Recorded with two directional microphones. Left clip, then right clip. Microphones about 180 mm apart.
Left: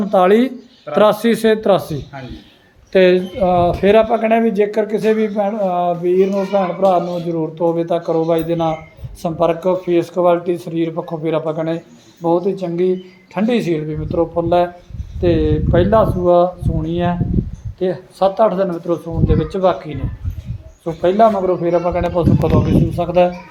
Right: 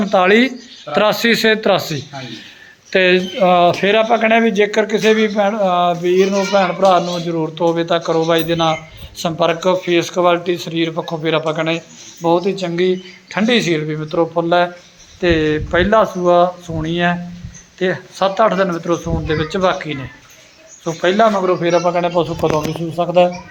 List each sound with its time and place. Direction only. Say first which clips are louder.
0.0 s a man's voice: even; 5° left (ahead or behind)
10.9 s a man's voice: right 1 dB; 15° right (ahead or behind)
11.2 s a man's voice: right 2 dB; 10° left (ahead or behind)
21.0 s speech: left 1 dB; centre (ahead or behind)